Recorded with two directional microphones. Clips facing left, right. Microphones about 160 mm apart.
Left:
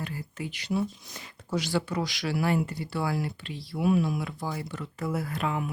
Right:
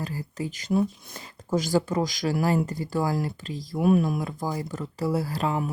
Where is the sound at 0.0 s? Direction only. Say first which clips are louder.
Right 4 dB; 35° right (ahead or behind).